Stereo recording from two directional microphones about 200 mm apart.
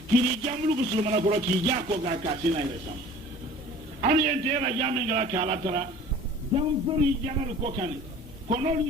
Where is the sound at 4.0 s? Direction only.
35° right (ahead or behind).